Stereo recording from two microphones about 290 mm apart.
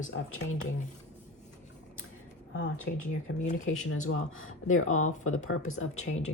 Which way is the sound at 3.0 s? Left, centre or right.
Left.